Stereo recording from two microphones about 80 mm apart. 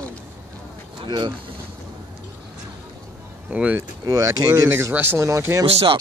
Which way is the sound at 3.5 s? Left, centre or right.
Centre.